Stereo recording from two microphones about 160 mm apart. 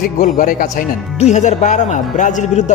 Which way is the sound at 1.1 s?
45° left (ahead or behind).